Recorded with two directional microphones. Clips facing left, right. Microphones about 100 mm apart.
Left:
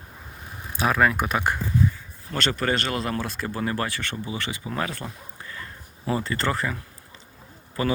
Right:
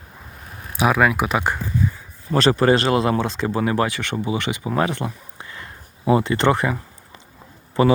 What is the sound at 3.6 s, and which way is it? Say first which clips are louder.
Speech: right 6 dB; 15° right (ahead or behind).